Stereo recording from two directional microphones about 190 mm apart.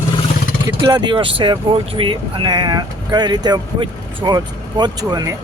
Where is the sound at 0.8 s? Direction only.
20° right (ahead or behind).